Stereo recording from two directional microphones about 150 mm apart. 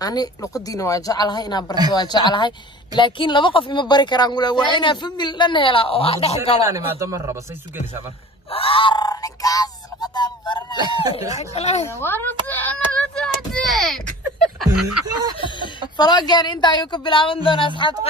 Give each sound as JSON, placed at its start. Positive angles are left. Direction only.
{"t": 0.0, "sound": "a woman's voice", "side_deg": 25}
{"t": 6.6, "sound": "speech", "side_deg": -20}
{"t": 8.5, "sound": "a sound", "side_deg": 40}
{"t": 10.8, "sound": "speech", "side_deg": -30}
{"t": 11.3, "sound": "speech", "side_deg": 45}
{"t": 12.0, "sound": "speech", "side_deg": 15}
{"t": 15.0, "sound": "speech", "side_deg": -25}
{"t": 16.0, "sound": "a woman's voice", "side_deg": 25}